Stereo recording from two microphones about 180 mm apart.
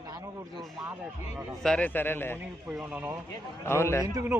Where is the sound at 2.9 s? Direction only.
10° right (ahead or behind).